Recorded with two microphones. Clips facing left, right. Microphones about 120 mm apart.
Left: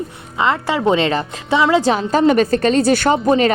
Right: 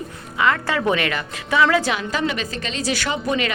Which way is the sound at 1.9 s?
40° left (ahead or behind).